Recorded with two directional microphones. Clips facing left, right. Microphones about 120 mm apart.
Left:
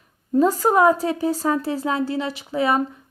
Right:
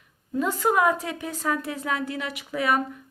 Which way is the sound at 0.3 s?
35° left (ahead or behind).